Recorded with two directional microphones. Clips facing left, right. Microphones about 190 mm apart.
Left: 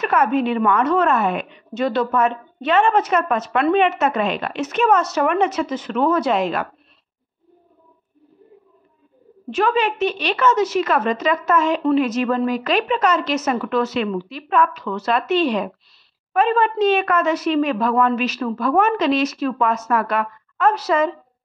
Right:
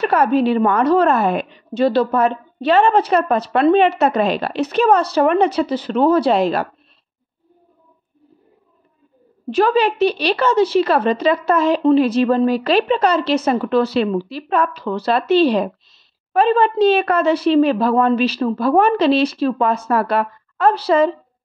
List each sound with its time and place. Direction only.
0.0 s a woman's voice: 35° right (ahead or behind)
9.5 s a woman's voice: 35° right (ahead or behind)